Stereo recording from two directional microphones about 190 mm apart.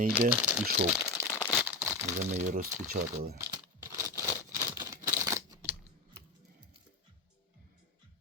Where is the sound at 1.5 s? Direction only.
10° right (ahead or behind).